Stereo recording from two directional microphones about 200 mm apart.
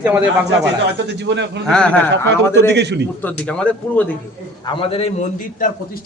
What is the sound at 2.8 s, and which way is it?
Speech, 60° right (ahead or behind).